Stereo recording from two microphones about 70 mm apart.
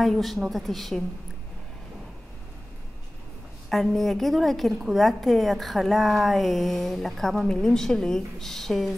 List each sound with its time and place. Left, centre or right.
0.0 s a woman's voice: centre
3.7 s a woman's voice: centre